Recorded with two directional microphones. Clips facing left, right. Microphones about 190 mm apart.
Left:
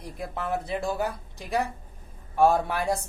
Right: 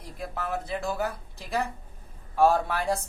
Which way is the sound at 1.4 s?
15° left (ahead or behind).